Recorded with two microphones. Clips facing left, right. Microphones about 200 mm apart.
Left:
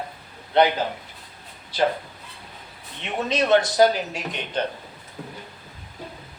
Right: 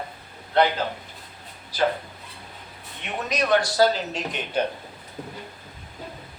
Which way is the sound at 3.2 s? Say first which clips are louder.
Left 3 dB; 25° left (ahead or behind).